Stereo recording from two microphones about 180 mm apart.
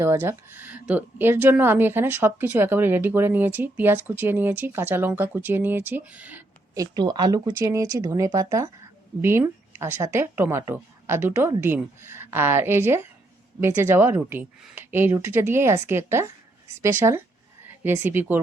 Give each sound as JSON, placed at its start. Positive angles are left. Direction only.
{"t": 0.0, "sound": "a woman's voice", "side_deg": -15}
{"t": 6.7, "sound": "a woman's voice", "side_deg": -25}